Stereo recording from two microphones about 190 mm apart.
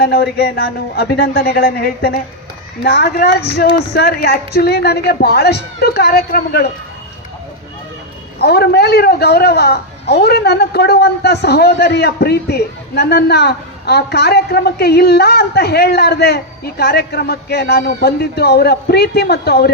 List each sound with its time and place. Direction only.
0.0 s a man's voice: 55° left (ahead or behind)
8.4 s a man's voice: 55° left (ahead or behind)